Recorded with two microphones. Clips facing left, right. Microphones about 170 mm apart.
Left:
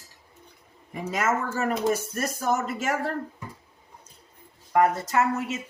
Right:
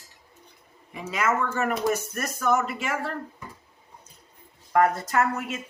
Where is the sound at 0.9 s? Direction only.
40° left (ahead or behind).